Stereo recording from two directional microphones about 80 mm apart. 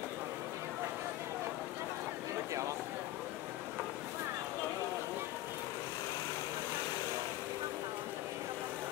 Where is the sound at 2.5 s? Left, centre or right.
Right.